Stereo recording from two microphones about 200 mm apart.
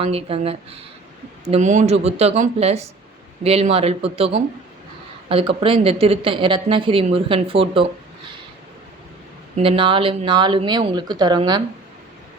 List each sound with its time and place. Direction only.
0.0 s speech: 30° right (ahead or behind)
9.6 s speech: 25° right (ahead or behind)